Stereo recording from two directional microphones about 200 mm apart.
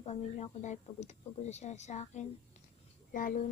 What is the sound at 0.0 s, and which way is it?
Speech, 35° left (ahead or behind).